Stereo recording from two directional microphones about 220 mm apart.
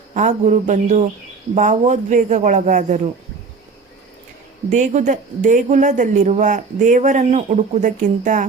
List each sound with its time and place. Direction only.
0.1 s speech: 30° right (ahead or behind)
4.7 s speech: 35° right (ahead or behind)